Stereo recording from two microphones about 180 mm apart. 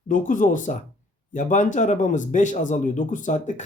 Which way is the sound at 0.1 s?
45° left (ahead or behind).